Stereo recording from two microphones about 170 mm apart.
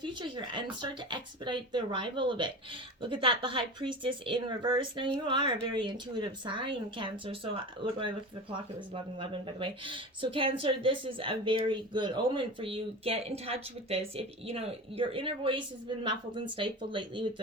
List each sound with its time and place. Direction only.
0.0 s speech: 25° right (ahead or behind)
9.1 s speech: 30° right (ahead or behind)